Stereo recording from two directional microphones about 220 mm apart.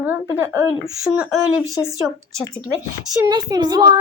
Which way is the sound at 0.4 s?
15° right (ahead or behind).